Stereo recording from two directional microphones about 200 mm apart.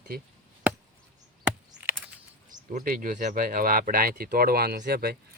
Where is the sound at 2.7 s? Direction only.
45° right (ahead or behind).